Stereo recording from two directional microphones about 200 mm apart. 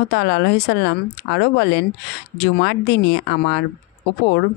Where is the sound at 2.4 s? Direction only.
55° left (ahead or behind).